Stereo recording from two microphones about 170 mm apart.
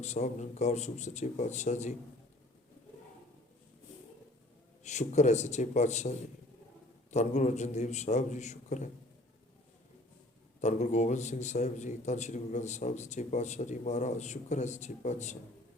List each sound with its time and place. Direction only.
0.0 s a man's voice: 40° left (ahead or behind)
4.8 s a man's voice: 45° left (ahead or behind)
10.6 s a man's voice: 45° left (ahead or behind)